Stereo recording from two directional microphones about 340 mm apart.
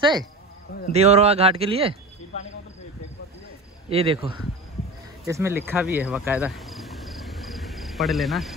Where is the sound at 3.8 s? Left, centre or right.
Centre.